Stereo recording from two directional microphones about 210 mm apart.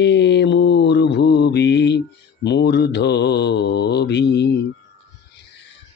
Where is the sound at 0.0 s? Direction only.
55° left (ahead or behind).